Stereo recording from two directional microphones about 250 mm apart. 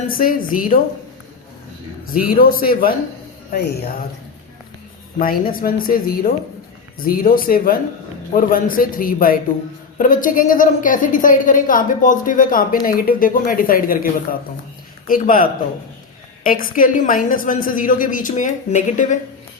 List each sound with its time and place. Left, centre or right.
0.1 s a woman's voice: left
2.1 s a woman's voice: left
5.2 s a woman's voice: left